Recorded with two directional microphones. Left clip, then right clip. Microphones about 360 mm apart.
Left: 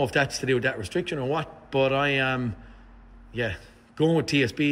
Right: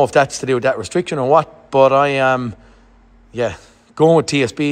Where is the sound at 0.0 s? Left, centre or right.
Centre.